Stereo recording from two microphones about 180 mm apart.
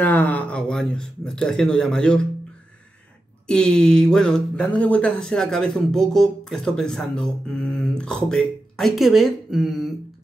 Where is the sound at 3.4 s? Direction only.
5° left (ahead or behind).